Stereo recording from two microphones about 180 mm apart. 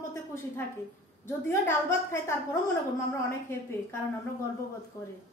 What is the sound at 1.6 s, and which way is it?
Speech, 15° left (ahead or behind).